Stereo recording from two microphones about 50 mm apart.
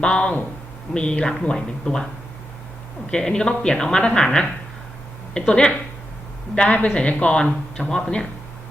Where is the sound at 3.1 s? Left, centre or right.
Centre.